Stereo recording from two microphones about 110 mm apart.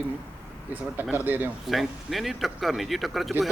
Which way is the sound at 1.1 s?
15° right (ahead or behind).